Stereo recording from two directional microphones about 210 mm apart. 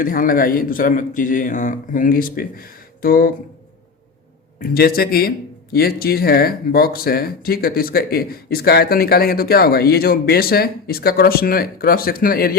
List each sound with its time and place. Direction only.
0.0 s speech: 40° left (ahead or behind)
4.6 s speech: 45° left (ahead or behind)